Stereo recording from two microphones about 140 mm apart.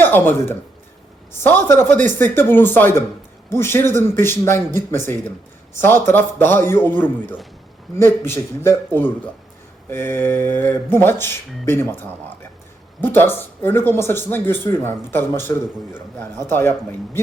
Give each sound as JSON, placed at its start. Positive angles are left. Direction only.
{"t": 0.0, "sound": "speech", "side_deg": 15}
{"t": 13.0, "sound": "speech", "side_deg": 15}